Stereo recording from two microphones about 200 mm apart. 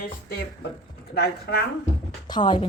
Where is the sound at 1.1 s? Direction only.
50° left (ahead or behind).